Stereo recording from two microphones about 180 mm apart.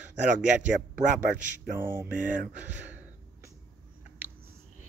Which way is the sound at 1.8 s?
15° right (ahead or behind).